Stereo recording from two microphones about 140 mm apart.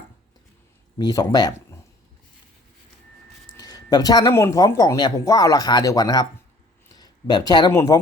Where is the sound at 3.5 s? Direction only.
30° left (ahead or behind).